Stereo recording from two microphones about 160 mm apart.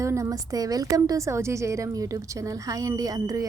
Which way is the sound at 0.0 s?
20° right (ahead or behind).